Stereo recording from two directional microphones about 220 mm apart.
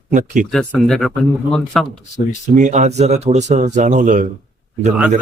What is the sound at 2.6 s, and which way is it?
Speech, 35° right (ahead or behind).